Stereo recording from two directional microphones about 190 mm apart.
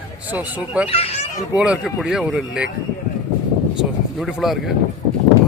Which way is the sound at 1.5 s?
5° right (ahead or behind).